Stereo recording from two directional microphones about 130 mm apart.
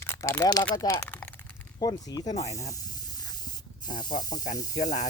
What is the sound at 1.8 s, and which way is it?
Speech, 30° left (ahead or behind).